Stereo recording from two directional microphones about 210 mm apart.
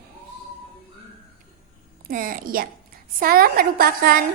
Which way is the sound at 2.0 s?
40° right (ahead or behind).